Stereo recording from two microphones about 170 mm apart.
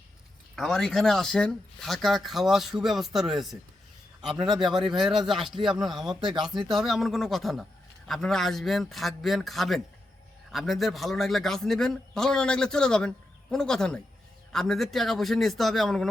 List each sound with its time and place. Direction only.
0.5 s a man's voice: centre (ahead or behind)
6.2 s speech: 30° right (ahead or behind)
6.7 s a man's voice: centre (ahead or behind)